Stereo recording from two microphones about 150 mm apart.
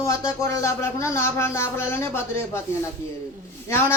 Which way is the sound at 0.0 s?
20° left (ahead or behind).